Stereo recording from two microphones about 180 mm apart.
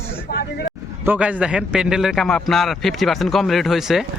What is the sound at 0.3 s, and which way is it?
Vehicle, 55° left (ahead or behind).